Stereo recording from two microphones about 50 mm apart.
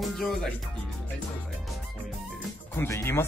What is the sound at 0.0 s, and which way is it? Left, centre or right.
Music, centre.